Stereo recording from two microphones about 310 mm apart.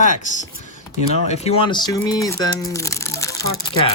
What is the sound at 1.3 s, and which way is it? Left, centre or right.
Speech, centre.